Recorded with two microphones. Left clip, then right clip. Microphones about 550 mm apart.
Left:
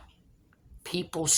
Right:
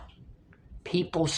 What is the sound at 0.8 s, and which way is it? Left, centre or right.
Speech, left.